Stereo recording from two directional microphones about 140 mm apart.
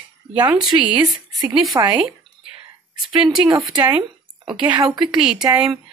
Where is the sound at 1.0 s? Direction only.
30° right (ahead or behind).